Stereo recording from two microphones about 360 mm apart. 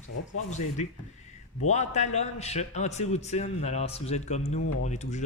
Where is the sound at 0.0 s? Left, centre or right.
Left.